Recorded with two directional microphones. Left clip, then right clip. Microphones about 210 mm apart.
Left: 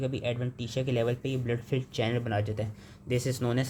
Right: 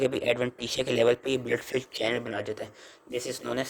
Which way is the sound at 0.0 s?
35° right (ahead or behind).